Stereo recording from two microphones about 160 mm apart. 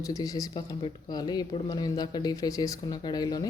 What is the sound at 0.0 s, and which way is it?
Speech, 20° left (ahead or behind).